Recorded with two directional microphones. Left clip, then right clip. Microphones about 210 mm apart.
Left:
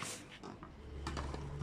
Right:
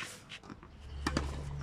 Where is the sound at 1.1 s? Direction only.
50° right (ahead or behind).